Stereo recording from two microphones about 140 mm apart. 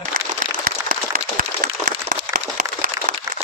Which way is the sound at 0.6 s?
90° right.